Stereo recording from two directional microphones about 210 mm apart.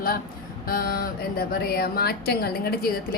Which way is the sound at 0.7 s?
45° left (ahead or behind).